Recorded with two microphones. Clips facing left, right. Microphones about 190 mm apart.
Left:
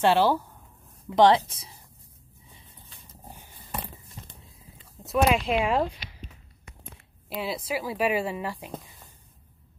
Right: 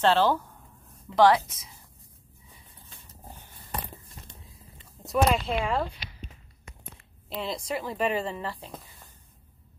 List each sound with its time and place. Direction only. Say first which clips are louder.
0.0 s speech: left 1 dB; 10° left (ahead or behind)
1.1 s speech: left 1 dB; 25° left (ahead or behind)
3.3 s a sound: even; 10° left (ahead or behind)
5.0 s speech: left 1 dB; centre (ahead or behind)
5.5 s speech: left 4 dB; 15° left (ahead or behind)
7.2 s speech: left 1 dB; 5° left (ahead or behind)